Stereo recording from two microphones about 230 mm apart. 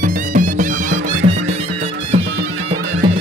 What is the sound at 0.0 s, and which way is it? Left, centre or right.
Music, right.